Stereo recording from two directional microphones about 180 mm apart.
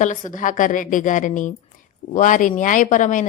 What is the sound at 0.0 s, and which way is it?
A woman's voice, 45° left (ahead or behind).